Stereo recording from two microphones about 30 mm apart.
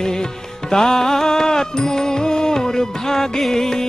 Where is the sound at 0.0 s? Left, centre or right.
Left.